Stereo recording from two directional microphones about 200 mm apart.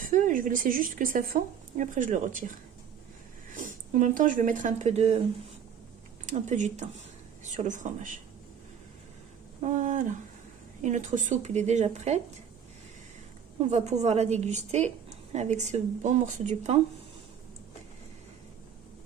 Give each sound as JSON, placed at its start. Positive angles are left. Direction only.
{"t": 0.1, "sound": "speech", "side_deg": -45}
{"t": 3.5, "sound": "speech", "side_deg": -40}
{"t": 6.2, "sound": "a woman's voice", "side_deg": -35}
{"t": 9.6, "sound": "a woman's voice", "side_deg": -35}
{"t": 13.6, "sound": "a woman's voice", "side_deg": -35}